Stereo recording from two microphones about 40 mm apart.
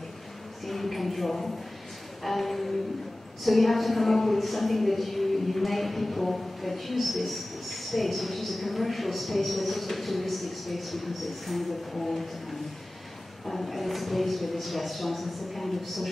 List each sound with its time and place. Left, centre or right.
0.7 s a woman's voice: centre
13.5 s a woman's voice: centre